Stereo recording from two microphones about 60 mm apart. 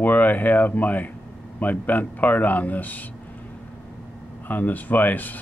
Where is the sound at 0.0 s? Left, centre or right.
Left.